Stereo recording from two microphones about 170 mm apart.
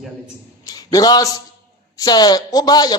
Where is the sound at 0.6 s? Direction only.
20° left (ahead or behind).